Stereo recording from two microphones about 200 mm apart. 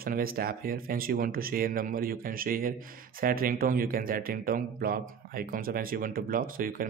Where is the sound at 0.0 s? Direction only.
45° right (ahead or behind).